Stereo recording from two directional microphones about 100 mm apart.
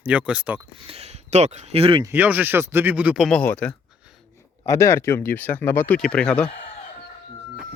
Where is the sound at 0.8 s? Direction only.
85° right.